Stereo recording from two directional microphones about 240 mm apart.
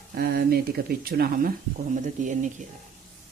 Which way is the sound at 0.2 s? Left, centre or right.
Right.